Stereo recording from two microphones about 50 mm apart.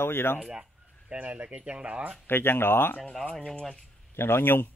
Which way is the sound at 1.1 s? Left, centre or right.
Right.